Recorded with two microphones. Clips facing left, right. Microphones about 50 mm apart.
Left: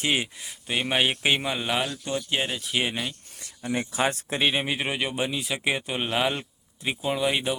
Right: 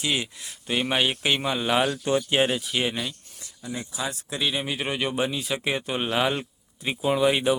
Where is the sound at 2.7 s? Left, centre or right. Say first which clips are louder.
Right 1 dB; centre.